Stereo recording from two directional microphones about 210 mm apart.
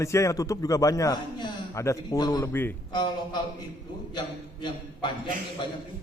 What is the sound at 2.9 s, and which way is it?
Speech, 20° left (ahead or behind).